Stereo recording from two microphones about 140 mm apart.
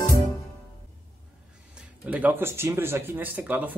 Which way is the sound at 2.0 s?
10° right (ahead or behind).